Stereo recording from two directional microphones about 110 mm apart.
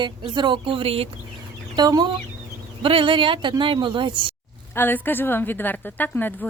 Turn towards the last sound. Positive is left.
turn(degrees=15)  # may be behind; listen again after turning